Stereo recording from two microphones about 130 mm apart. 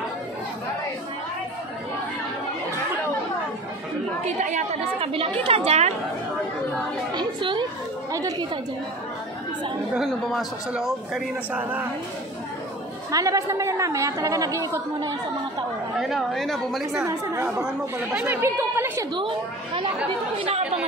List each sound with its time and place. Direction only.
4.4 s speech: 75° right (ahead or behind)
5.0 s a woman's voice: 45° right (ahead or behind)
7.2 s a woman's voice: 35° right (ahead or behind)
8.1 s speech: 25° right (ahead or behind)
9.9 s a man's voice: centre (ahead or behind)
13.1 s a woman's voice: 25° right (ahead or behind)
16.0 s a man's voice: centre (ahead or behind)
17.0 s a woman's voice: 25° right (ahead or behind)
17.6 s speech: 10° right (ahead or behind)
19.1 s a woman's voice: 40° right (ahead or behind)
20.3 s a woman's voice: 55° right (ahead or behind)